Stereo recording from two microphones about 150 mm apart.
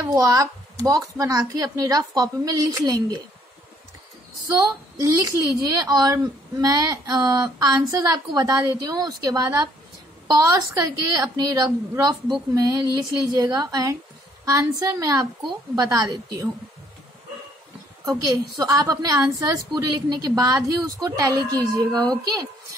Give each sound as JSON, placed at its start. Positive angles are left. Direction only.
{"t": 0.0, "sound": "a woman's voice", "side_deg": -20}
{"t": 5.0, "sound": "a woman's voice", "side_deg": -20}
{"t": 18.0, "sound": "a woman's voice", "side_deg": -25}